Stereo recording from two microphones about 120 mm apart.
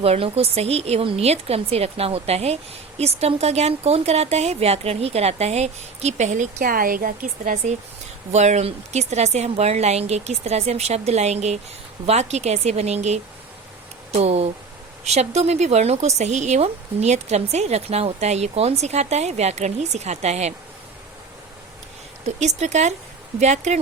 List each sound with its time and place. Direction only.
0.0 s speech: 55° right (ahead or behind); by 6.5 s 85° right
7.7 s speech: 75° right (ahead or behind)
14.2 s speech: 65° right (ahead or behind)
22.4 s speech: 70° right (ahead or behind)